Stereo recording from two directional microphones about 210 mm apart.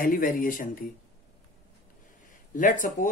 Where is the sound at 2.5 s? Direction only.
40° left (ahead or behind).